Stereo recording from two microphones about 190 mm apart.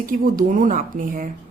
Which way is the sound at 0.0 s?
45° right (ahead or behind).